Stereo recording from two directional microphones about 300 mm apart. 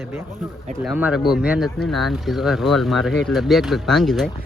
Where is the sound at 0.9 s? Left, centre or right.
Centre.